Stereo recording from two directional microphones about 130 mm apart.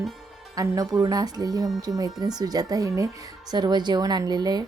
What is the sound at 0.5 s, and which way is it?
A woman's voice, 30° right (ahead or behind).